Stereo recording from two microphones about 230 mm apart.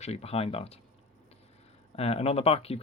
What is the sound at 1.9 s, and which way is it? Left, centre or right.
Speech, left.